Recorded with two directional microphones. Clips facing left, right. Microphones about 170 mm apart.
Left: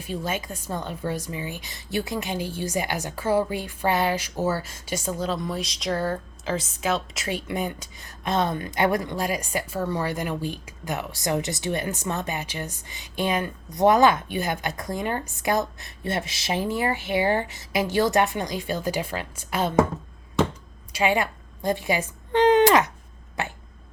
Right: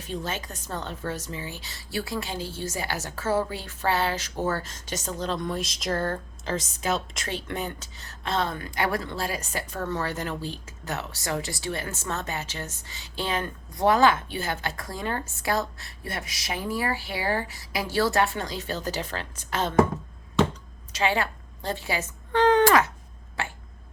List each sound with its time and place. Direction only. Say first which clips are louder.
0.0 s speech: left 3 dB; 10° left (ahead or behind)
20.9 s a woman's voice: left 3 dB; 15° left (ahead or behind)